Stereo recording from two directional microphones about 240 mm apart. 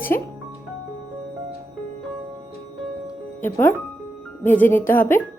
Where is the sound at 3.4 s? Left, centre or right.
Centre.